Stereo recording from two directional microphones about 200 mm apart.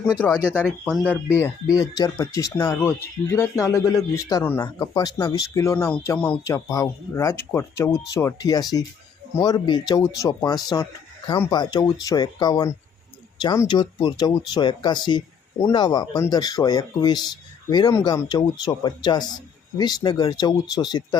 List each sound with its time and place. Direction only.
0.6 s speech: centre (ahead or behind); by 21.2 s 20° left (ahead or behind)